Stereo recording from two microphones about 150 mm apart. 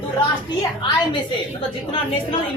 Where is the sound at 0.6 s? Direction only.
25° left (ahead or behind).